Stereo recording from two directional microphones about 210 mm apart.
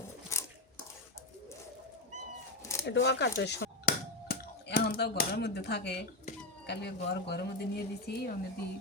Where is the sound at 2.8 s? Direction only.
55° left (ahead or behind).